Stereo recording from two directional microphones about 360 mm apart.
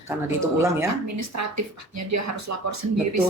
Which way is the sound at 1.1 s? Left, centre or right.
Right.